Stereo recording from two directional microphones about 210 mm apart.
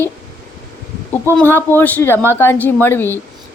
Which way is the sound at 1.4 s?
10° left (ahead or behind).